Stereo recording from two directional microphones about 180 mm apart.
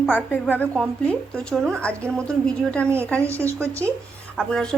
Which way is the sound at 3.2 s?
15° right (ahead or behind).